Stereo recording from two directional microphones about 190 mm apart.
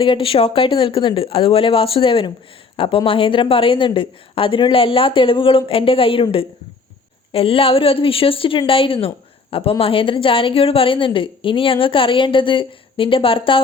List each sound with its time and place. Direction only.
0.0 s a woman's voice: 30° left (ahead or behind)